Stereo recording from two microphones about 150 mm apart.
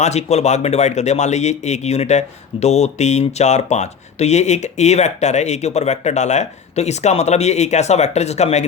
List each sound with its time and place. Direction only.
0.0 s speech: 45° left (ahead or behind)